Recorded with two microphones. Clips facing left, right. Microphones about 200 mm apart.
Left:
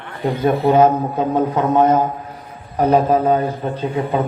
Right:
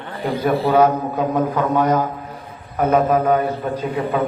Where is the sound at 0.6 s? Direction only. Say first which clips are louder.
Left 3 dB; 25° left (ahead or behind).